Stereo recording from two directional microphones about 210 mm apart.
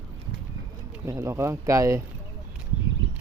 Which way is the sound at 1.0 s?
15° right (ahead or behind).